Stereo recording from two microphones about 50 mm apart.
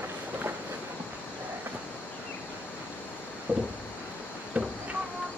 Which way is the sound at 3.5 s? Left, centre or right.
Right.